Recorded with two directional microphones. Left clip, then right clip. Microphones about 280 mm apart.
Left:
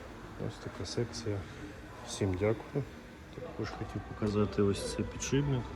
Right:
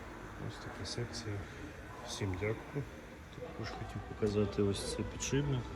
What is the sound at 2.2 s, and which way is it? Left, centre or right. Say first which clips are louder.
Speech: left 8 dB; left.